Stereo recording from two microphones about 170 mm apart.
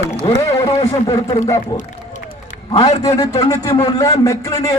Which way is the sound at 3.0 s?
20° left (ahead or behind).